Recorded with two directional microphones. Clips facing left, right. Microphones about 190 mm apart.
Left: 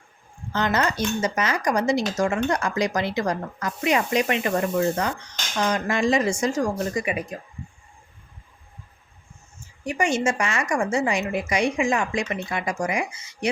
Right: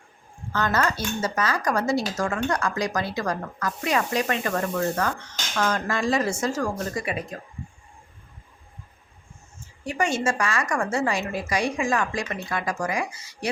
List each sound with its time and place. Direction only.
0.5 s speech: 20° left (ahead or behind)
10.0 s speech: 20° left (ahead or behind)